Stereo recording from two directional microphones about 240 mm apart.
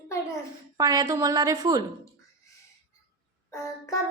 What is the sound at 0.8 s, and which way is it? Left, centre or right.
A woman's voice, centre.